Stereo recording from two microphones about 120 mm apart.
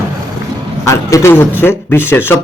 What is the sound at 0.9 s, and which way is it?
Speech, 25° left (ahead or behind).